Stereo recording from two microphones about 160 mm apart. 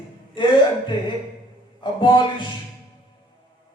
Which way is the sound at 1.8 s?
30° left (ahead or behind).